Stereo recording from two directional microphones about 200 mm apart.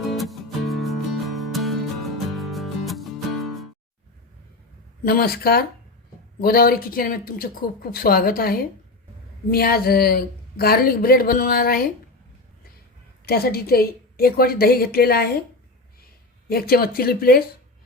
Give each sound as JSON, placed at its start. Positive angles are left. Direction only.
{"t": 0.1, "sound": "music", "side_deg": 0}
{"t": 5.0, "sound": "speech", "side_deg": 50}
{"t": 13.2, "sound": "speech", "side_deg": 50}
{"t": 16.5, "sound": "speech", "side_deg": 50}